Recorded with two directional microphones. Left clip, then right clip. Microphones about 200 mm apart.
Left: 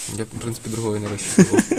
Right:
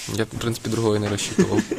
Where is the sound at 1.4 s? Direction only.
55° left (ahead or behind).